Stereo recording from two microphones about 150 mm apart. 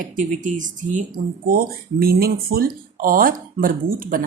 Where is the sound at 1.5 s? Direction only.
85° right.